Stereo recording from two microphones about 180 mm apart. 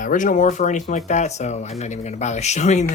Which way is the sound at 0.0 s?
45° left (ahead or behind).